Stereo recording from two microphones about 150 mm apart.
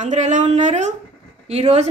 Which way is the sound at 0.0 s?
55° right (ahead or behind).